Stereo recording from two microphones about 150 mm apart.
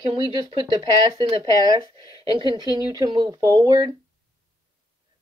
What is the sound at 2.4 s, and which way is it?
Speech, 30° right (ahead or behind).